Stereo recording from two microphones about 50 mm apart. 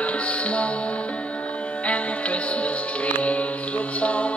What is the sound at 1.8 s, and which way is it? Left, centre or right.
Music, left.